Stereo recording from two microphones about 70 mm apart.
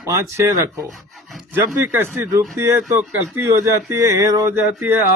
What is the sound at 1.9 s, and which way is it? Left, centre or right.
Speech, right.